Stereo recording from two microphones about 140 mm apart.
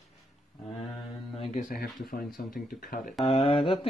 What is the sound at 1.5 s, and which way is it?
Speech, 70° left (ahead or behind).